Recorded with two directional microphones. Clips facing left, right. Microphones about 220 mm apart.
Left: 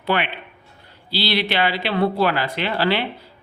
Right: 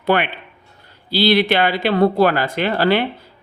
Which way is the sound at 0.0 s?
50° right (ahead or behind).